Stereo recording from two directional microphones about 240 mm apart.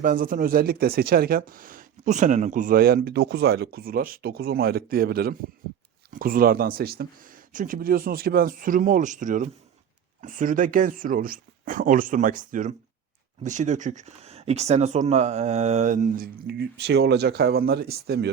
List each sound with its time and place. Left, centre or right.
0.0 s speech: right